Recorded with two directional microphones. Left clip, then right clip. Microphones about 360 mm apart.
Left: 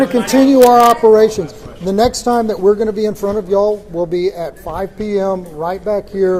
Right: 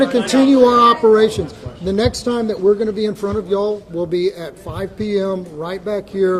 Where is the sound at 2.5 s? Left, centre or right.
Centre.